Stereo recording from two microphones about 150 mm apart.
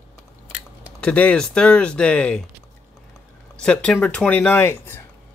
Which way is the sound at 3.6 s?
5° left (ahead or behind).